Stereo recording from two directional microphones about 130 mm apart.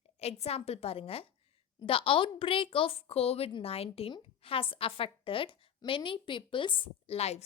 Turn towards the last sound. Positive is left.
turn(degrees=55)  # may be behind; listen again after turning